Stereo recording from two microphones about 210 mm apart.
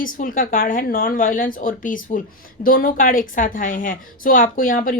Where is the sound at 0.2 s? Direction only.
40° left (ahead or behind).